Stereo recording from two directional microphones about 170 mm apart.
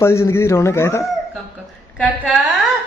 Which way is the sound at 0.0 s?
15° left (ahead or behind).